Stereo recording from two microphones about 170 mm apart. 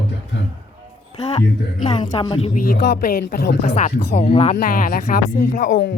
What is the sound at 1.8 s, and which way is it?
Speech, 25° left (ahead or behind).